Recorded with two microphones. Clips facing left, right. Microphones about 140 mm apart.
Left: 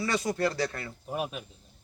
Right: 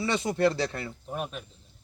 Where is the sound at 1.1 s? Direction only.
5° left (ahead or behind).